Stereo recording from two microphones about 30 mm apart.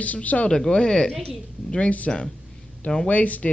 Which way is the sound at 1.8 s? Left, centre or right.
Left.